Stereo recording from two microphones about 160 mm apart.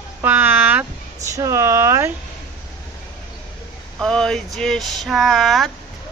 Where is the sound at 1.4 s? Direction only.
20° right (ahead or behind).